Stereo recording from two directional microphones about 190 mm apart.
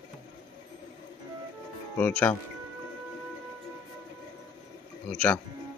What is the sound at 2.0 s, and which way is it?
Speech, 10° left (ahead or behind).